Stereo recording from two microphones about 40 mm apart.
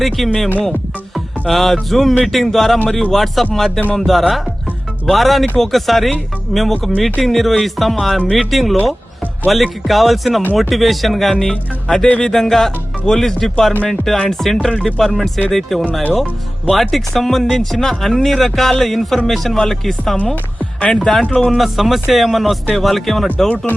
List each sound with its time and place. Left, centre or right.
0.2 s speech: centre
1.1 s music: centre
2.9 s speech: centre
11.5 s speech: centre
20.6 s music: left
21.1 s speech: centre
21.5 s speech: centre